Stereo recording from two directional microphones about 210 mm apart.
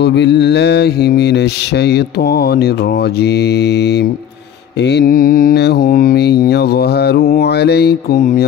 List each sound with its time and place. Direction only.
0.0 s mantra: 55° left (ahead or behind)
8.2 s mantra: 35° left (ahead or behind)